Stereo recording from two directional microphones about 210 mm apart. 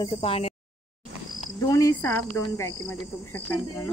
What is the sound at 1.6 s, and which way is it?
Speech, 15° left (ahead or behind).